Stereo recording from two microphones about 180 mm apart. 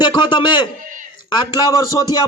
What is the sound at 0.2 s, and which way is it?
A man's voice, 25° left (ahead or behind).